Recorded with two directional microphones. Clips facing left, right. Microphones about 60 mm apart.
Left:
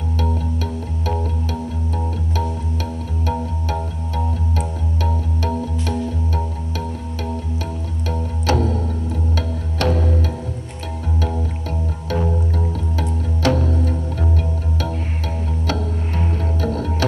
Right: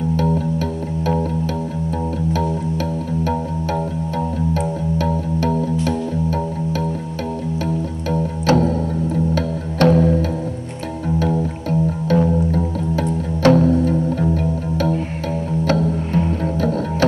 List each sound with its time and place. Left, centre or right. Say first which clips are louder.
4.6 s music: right 5 dB; right
8.5 s music: right 4 dB; right
12.1 s music: right 5 dB; right
16.5 s music: right 3 dB; right